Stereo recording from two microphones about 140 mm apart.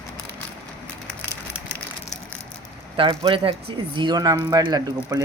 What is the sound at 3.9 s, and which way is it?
Speech, 30° right (ahead or behind).